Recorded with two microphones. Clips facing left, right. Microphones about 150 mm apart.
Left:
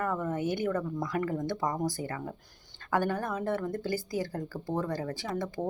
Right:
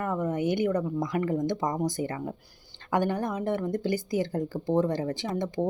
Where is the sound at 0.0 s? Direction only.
15° right (ahead or behind).